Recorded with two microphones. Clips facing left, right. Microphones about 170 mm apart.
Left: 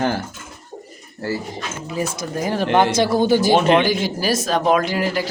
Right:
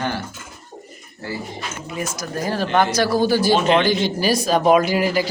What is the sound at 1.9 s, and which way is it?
Speech, 30° left (ahead or behind).